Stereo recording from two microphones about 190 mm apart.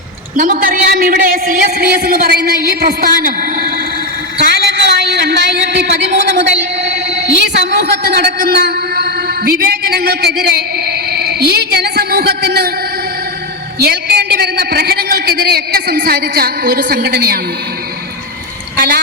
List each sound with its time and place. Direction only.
0.3 s a man's voice: 45° right (ahead or behind)
4.5 s a sound: 60° right (ahead or behind)
8.0 s a man's voice: 55° right (ahead or behind)
13.7 s a woman's voice: 55° right (ahead or behind)
18.8 s a woman's voice: 60° right (ahead or behind)